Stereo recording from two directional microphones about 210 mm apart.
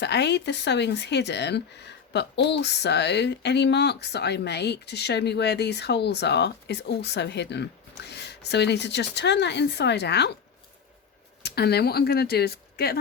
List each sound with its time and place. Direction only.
0.0 s speech: 55° left (ahead or behind)
11.4 s speech: 50° left (ahead or behind)